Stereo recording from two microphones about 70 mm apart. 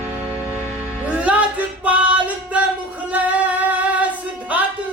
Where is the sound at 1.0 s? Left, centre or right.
Centre.